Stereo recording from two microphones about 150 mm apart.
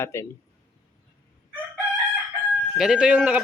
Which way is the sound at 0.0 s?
15° left (ahead or behind).